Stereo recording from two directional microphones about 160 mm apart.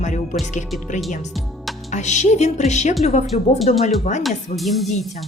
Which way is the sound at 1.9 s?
45° left (ahead or behind).